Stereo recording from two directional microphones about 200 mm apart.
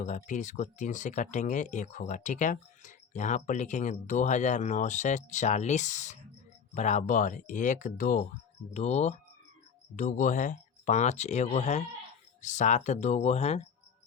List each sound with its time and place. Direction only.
0.0 s speech: 40° left (ahead or behind)